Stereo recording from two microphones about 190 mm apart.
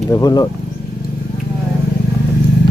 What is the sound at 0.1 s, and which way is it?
Speech, 20° left (ahead or behind).